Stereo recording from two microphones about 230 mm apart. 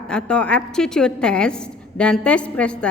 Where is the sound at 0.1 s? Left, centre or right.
Centre.